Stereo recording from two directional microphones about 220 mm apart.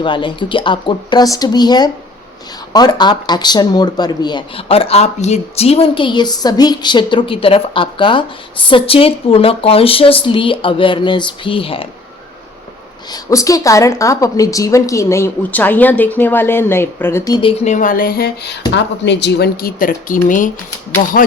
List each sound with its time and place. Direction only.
0.0 s speech: 20° left (ahead or behind)
13.1 s a woman's voice: 15° left (ahead or behind)
17.6 s speech: 35° left (ahead or behind)